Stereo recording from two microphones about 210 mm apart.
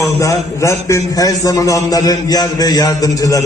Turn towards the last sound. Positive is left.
turn(degrees=15)  # may be behind; listen again after turning